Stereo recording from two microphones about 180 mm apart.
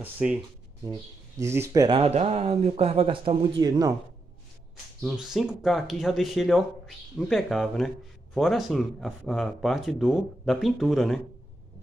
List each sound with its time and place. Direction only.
0.0 s speech: 10° right (ahead or behind)
1.4 s speech: 15° right (ahead or behind)
2.0 s speech: 35° right (ahead or behind)
5.0 s speech: centre (ahead or behind)